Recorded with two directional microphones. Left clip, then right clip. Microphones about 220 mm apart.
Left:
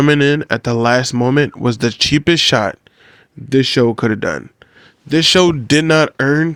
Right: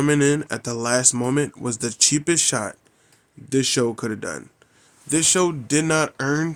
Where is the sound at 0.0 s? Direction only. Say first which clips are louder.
Left 7 dB; 40° left (ahead or behind).